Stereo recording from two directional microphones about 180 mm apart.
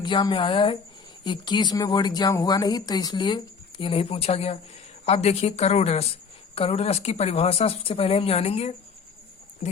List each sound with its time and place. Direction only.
0.0 s speech: 25° left (ahead or behind)